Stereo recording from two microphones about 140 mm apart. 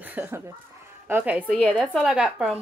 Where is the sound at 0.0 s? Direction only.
15° right (ahead or behind).